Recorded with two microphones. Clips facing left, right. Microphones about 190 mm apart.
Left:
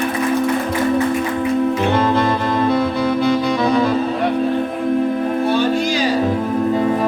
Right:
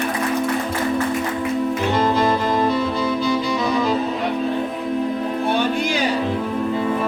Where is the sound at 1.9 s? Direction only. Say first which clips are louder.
Left 2 dB; 60° left (ahead or behind).